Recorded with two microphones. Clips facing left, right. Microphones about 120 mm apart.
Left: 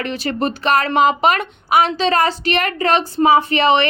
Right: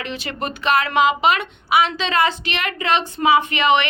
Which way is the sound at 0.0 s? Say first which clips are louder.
Left 6 dB; 40° left (ahead or behind).